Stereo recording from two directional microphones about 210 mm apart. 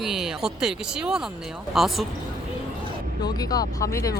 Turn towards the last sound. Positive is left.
turn(degrees=15)  # may be behind; listen again after turning